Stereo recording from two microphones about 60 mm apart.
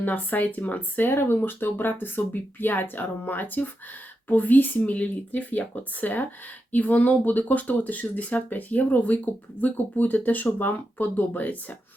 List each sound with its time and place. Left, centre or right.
0.0 s speech: left
1.1 s speech: left